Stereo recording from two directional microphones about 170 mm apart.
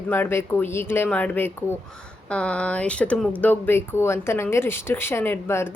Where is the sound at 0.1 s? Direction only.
15° left (ahead or behind).